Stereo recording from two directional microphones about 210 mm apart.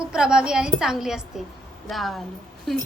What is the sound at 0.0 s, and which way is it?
A woman's voice, 5° right (ahead or behind).